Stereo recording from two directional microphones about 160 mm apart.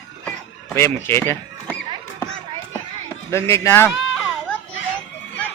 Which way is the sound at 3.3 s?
15° left (ahead or behind).